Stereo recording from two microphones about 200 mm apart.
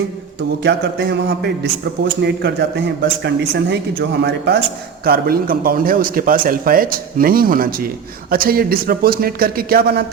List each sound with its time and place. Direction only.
0.6 s a man's voice: 55° right (ahead or behind)